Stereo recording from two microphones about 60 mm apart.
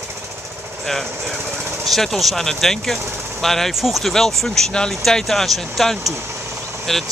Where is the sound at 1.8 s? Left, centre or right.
Centre.